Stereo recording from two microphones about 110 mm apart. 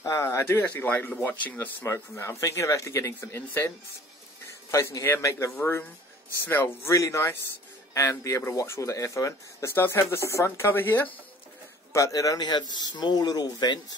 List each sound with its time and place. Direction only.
0.0 s a man's voice: 30° left (ahead or behind)
11.9 s speech: 30° left (ahead or behind)